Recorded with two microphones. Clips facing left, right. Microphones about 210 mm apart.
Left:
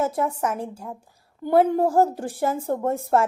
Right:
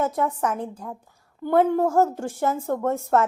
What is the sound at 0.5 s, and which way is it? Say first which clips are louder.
A woman's voice: even; 10° left (ahead or behind).